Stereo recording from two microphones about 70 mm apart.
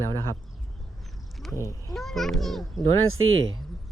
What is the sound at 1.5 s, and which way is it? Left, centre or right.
Speech, left.